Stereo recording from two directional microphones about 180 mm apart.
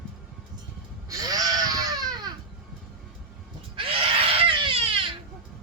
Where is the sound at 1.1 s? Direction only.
20° right (ahead or behind).